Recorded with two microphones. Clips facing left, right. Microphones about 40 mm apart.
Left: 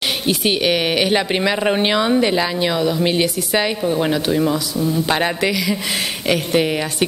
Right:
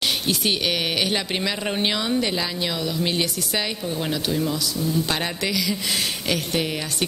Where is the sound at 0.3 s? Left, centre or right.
Centre.